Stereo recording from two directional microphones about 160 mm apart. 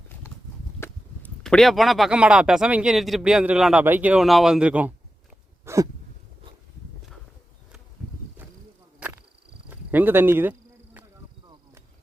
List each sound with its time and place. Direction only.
0.8 s speech: 5° left (ahead or behind)
5.6 s a sound: 20° right (ahead or behind)
9.0 s insect: 10° right (ahead or behind)